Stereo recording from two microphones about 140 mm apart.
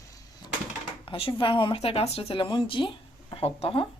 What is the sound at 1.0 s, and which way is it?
Speech, 40° left (ahead or behind).